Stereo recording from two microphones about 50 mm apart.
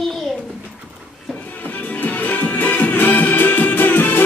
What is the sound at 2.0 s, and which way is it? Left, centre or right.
Music, left.